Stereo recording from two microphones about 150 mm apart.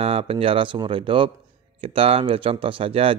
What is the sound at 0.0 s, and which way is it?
A man's voice, 40° right (ahead or behind).